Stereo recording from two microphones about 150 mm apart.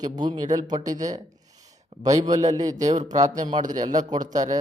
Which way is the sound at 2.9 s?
55° right (ahead or behind).